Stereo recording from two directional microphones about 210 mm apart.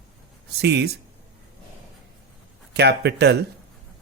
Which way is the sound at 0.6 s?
55° right (ahead or behind).